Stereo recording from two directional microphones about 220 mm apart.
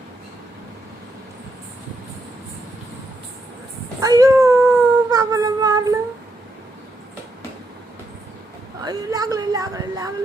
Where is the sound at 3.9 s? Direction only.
15° right (ahead or behind).